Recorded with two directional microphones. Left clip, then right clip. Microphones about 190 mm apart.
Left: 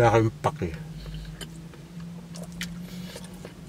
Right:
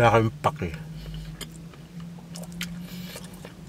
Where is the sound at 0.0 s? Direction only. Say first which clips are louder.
Right 1 dB; 5° left (ahead or behind).